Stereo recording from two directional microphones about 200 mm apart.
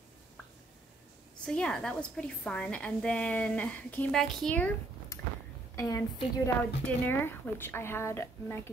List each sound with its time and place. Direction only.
1.4 s a woman's voice: 5° left (ahead or behind)